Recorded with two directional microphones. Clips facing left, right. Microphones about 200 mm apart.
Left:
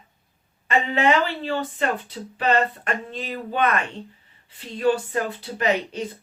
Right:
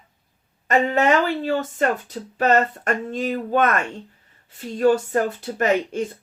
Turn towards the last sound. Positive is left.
turn(degrees=-50)  # may be behind; listen again after turning